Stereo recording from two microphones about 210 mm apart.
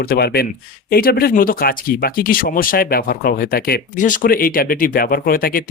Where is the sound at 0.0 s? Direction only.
45° left (ahead or behind).